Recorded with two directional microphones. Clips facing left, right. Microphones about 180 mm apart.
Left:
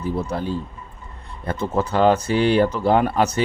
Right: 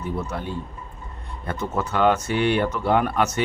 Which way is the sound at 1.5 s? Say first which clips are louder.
Left 4 dB; 35° left (ahead or behind).